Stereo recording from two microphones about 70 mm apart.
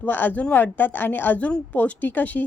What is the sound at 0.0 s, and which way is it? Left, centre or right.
A woman's voice, left.